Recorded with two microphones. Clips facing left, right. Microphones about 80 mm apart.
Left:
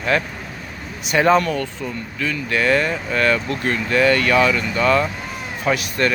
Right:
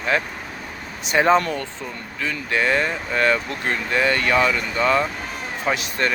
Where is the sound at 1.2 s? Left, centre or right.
Right.